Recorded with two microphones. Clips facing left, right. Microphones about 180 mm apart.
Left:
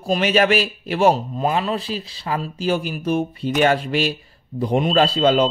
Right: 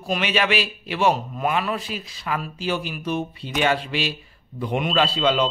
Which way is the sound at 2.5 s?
45° left (ahead or behind).